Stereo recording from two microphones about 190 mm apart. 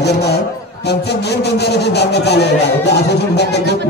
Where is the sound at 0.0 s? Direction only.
60° left (ahead or behind).